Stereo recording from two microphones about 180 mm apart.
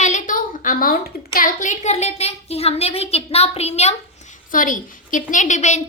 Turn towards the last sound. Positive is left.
turn(degrees=40)  # may be behind; listen again after turning